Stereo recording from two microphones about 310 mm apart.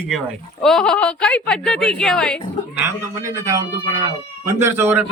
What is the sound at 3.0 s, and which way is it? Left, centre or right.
A man's voice, centre.